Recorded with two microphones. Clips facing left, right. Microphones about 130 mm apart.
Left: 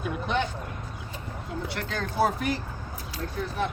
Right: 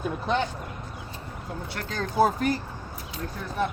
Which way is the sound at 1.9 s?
40° right (ahead or behind).